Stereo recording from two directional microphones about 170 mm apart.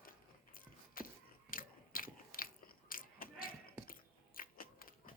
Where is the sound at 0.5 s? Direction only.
55° left (ahead or behind).